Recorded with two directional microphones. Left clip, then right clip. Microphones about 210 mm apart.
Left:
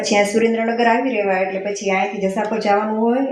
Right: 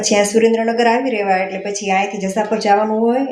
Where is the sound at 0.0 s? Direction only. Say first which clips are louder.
Right 3 dB; 15° right (ahead or behind).